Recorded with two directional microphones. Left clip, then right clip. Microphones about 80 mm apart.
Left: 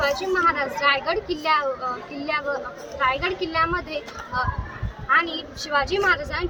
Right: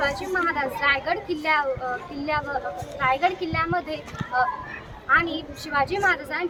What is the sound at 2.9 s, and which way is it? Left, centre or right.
A child's voice, right.